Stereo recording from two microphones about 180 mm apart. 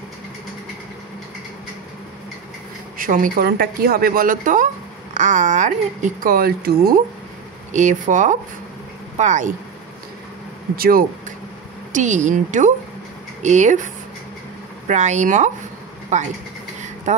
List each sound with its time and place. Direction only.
3.0 s speech: 50° right (ahead or behind)
7.7 s speech: 45° right (ahead or behind)
10.8 s speech: 55° right (ahead or behind)
11.9 s speech: 40° right (ahead or behind)
14.9 s speech: 40° right (ahead or behind)